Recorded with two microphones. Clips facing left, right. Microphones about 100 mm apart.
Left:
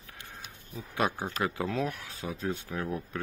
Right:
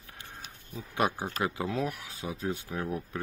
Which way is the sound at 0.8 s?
15° right (ahead or behind).